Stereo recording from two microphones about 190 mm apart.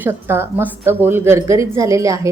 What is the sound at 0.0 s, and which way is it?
A woman's voice, 10° right (ahead or behind).